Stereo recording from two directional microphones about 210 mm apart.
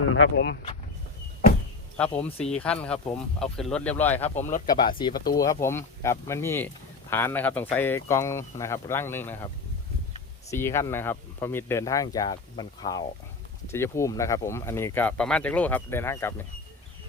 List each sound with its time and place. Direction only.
0.0 s speech: 70° left (ahead or behind); by 0.6 s 55° left (ahead or behind)
2.2 s speech: 5° left (ahead or behind)
4.4 s speech: 35° left (ahead or behind)
4.6 s speech: 20° left (ahead or behind)
10.5 s speech: 10° left (ahead or behind)